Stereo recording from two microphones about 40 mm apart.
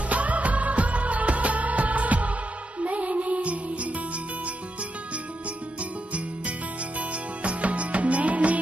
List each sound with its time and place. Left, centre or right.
0.1 s music of bollywood: right
2.8 s music: right
5.8 s music: right